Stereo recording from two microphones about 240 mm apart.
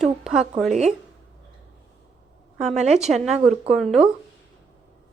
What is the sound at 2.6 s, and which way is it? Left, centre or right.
Speech, right.